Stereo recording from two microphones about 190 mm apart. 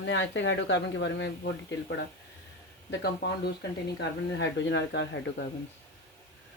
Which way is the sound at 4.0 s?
65° left (ahead or behind).